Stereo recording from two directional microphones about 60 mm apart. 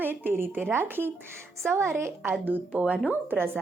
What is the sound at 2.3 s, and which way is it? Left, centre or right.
A woman's voice, right.